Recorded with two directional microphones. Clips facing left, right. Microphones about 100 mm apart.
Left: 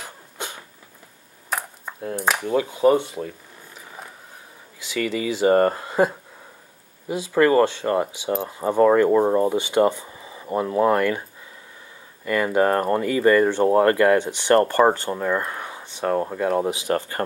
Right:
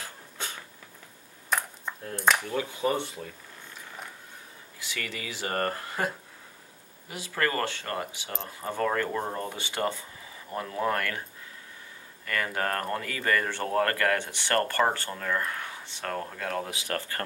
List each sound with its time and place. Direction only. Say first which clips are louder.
0.0 s sneeze: left 5 dB; 15° left (ahead or behind)
1.5 s cutlery: left 1 dB; 5° left (ahead or behind)
2.3 s speech: left 8 dB; 20° left (ahead or behind)
4.7 s speech: left 12 dB; 20° left (ahead or behind)
12.5 s speech: left 13 dB; 20° left (ahead or behind)